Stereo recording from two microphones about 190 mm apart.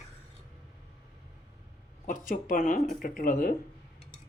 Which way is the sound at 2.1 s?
45° left (ahead or behind).